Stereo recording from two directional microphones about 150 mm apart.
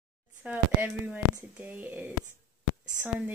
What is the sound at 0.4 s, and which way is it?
Speech, 15° right (ahead or behind).